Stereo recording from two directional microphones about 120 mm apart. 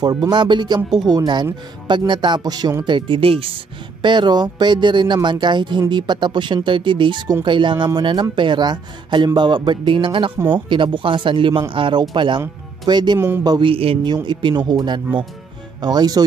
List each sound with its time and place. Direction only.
0.0 s speech: 35° right (ahead or behind)
4.0 s speech: 40° right (ahead or behind)
13.7 s speech: 50° right (ahead or behind)
14.1 s speech: 40° right (ahead or behind)